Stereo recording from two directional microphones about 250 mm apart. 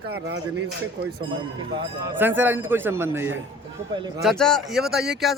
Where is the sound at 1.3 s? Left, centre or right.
Centre.